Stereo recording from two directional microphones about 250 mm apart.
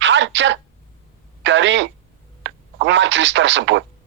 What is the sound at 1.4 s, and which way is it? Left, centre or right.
Speech, right.